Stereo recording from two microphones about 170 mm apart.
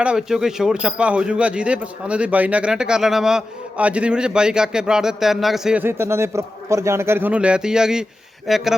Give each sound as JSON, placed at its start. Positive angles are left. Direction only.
{"t": 0.0, "sound": "speech", "side_deg": -5}